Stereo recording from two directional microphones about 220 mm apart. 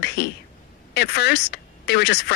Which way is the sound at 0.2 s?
50° left (ahead or behind).